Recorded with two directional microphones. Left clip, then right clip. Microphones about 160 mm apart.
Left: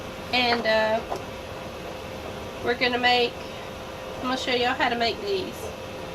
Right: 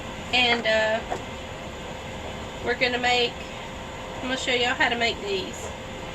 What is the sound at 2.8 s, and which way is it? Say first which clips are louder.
Speech: left 1 dB; 25° left (ahead or behind).